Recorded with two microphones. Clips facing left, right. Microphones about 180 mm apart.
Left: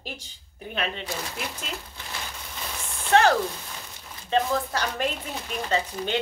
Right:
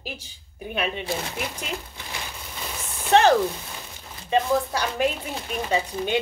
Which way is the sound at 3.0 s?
20° right (ahead or behind).